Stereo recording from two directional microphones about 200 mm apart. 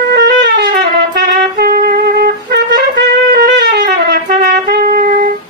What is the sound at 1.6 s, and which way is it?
Music, 50° right (ahead or behind).